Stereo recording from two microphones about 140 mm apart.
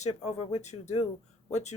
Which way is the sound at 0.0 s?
55° left (ahead or behind).